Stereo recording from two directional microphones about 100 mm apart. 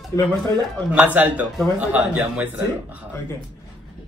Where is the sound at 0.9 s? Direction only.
15° right (ahead or behind).